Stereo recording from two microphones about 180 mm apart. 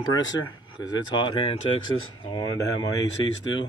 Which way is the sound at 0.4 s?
25° left (ahead or behind).